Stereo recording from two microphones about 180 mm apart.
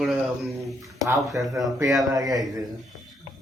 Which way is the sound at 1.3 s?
Centre (ahead or behind).